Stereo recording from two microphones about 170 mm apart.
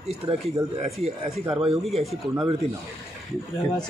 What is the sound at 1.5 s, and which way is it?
Speech, 30° right (ahead or behind).